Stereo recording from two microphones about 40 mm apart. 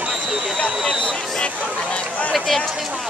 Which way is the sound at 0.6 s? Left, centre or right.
Left.